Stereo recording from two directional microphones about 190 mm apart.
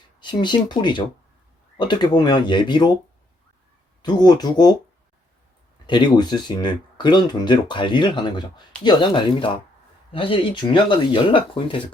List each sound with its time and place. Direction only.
0.2 s speech: 25° left (ahead or behind)
4.0 s speech: 20° left (ahead or behind)
5.8 s speech: 25° left (ahead or behind)